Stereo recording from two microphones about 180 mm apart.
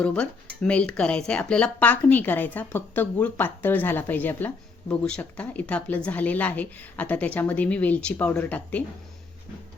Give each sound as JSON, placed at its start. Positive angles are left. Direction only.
{"t": 0.0, "sound": "speech", "side_deg": 5}